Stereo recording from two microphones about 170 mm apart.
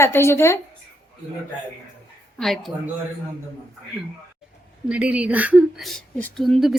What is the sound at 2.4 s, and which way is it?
Speech, centre (ahead or behind).